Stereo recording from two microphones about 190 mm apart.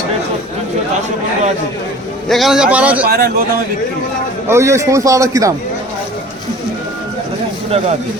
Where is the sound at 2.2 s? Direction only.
Centre (ahead or behind).